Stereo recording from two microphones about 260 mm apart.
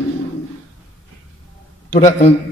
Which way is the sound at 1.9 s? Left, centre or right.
Left.